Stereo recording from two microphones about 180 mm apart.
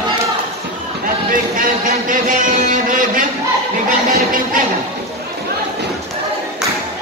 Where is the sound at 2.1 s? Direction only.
50° right (ahead or behind).